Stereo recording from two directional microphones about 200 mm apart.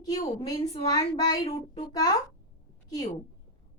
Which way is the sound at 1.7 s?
20° left (ahead or behind).